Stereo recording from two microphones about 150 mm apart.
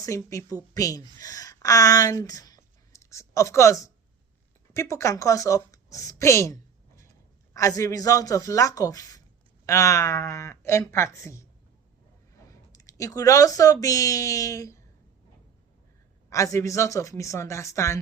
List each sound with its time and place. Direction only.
0.0 s a woman's voice: 20° left (ahead or behind)
12.5 s speech: 20° left (ahead or behind)
16.3 s speech: 20° left (ahead or behind)